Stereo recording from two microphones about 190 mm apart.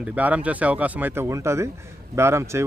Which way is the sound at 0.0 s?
5° right (ahead or behind).